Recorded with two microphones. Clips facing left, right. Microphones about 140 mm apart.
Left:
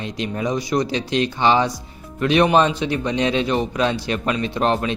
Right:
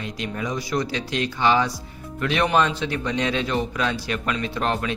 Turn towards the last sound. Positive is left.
turn(degrees=20)  # may be behind; listen again after turning